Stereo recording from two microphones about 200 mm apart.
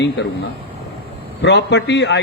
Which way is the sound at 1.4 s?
60° left (ahead or behind).